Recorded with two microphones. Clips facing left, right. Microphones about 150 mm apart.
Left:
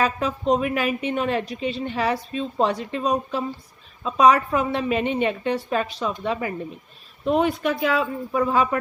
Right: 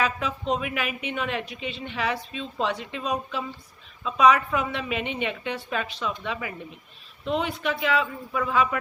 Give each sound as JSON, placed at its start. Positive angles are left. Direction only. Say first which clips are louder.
{"t": 0.0, "sound": "speech", "louder": "left 4 dB", "side_deg": 40}